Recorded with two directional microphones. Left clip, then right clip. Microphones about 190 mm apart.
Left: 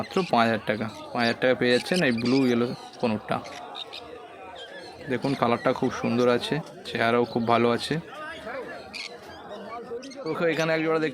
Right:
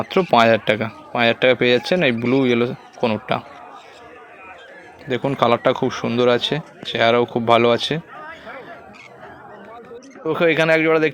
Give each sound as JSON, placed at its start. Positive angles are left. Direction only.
{"t": 0.1, "sound": "speech", "side_deg": -30}
{"t": 5.0, "sound": "speech", "side_deg": -20}
{"t": 10.2, "sound": "speech", "side_deg": -25}